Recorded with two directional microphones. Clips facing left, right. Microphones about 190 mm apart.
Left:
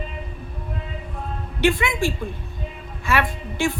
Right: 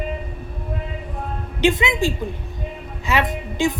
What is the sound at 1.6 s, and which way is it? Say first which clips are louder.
A woman's voice: right 2 dB; 20° right (ahead or behind).